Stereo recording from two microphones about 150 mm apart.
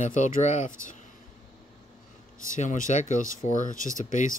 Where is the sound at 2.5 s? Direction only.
55° left (ahead or behind).